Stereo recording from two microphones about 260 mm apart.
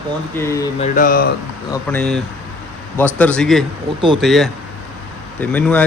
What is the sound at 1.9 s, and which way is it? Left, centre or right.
Speech, centre.